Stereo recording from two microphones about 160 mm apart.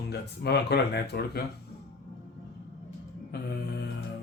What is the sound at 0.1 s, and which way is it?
A man's voice, 90° left.